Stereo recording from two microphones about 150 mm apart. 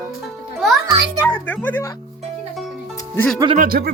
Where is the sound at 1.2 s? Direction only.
10° left (ahead or behind).